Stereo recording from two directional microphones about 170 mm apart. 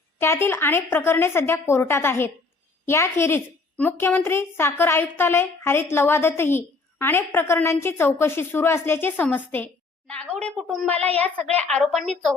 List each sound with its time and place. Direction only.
0.2 s a woman's voice: 15° left (ahead or behind)